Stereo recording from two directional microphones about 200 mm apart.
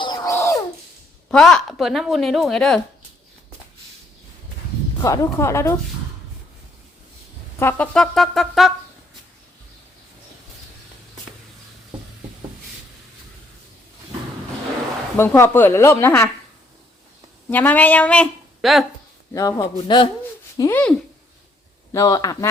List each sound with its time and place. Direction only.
0.0 s a sound: 20° left (ahead or behind)
1.3 s speech: 5° left (ahead or behind)
4.9 s a woman's voice: 15° left (ahead or behind)
7.6 s speech: 10° left (ahead or behind)
15.1 s a woman's voice: 10° left (ahead or behind)
17.5 s a woman's voice: 10° left (ahead or behind)
19.3 s a woman's voice: 15° left (ahead or behind)
20.6 s a woman's voice: 10° left (ahead or behind)
21.9 s a woman's voice: 15° left (ahead or behind)